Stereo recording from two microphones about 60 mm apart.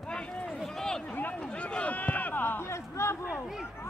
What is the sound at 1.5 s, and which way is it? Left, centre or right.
Speech, centre.